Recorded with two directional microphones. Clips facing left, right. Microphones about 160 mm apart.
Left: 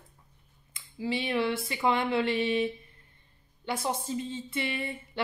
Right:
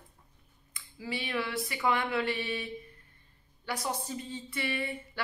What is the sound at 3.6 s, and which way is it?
Speech, 25° left (ahead or behind).